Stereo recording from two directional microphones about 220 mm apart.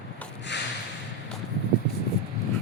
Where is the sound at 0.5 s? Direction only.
50° left (ahead or behind).